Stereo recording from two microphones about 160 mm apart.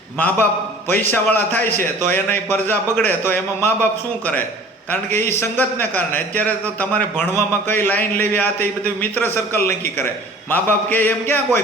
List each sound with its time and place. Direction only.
0.2 s a man's voice: 10° left (ahead or behind)
4.9 s a man's voice: 15° left (ahead or behind)